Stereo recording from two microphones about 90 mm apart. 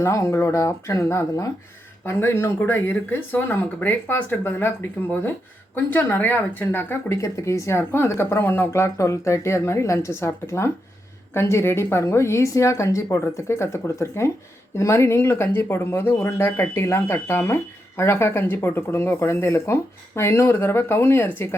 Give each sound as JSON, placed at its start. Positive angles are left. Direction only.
{"t": 0.0, "sound": "speech", "side_deg": 35}
{"t": 5.7, "sound": "speech", "side_deg": 20}